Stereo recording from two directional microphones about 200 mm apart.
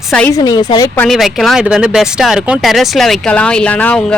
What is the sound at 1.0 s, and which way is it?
Speech, centre (ahead or behind).